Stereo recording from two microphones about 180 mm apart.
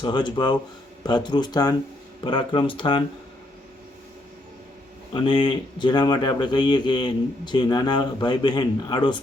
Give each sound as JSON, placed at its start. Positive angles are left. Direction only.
{"t": 0.0, "sound": "speech", "side_deg": 25}
{"t": 5.1, "sound": "speech", "side_deg": 25}